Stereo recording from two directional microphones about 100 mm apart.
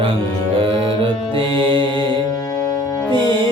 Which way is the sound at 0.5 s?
65° right (ahead or behind).